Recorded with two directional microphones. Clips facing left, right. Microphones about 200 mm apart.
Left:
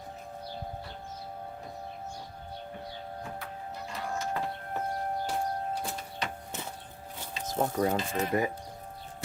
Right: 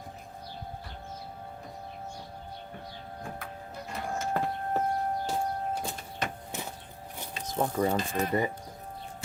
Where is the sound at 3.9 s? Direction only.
50° right (ahead or behind).